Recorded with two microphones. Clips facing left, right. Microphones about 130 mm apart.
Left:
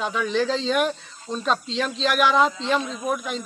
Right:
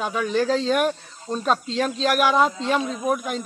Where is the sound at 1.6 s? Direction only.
50° right (ahead or behind).